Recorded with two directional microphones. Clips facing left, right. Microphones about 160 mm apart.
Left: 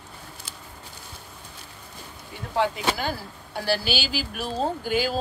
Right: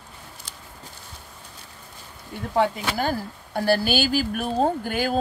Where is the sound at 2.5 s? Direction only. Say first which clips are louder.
Right 3 dB; 50° right (ahead or behind).